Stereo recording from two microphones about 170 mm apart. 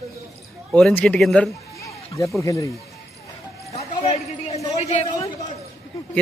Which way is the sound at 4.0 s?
40° left (ahead or behind).